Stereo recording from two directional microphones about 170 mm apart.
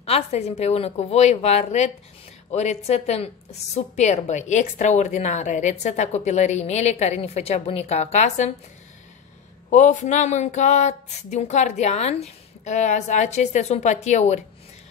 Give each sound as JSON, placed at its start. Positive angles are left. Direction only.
{"t": 0.0, "sound": "a woman's voice", "side_deg": 40}
{"t": 9.7, "sound": "a woman's voice", "side_deg": 45}